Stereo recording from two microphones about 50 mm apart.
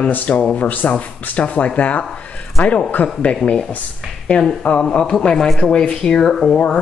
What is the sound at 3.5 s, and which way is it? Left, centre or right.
Speech, centre.